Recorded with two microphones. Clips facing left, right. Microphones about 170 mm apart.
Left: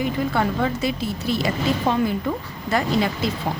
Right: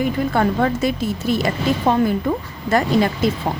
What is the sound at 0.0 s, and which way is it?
A woman's voice, 50° right (ahead or behind).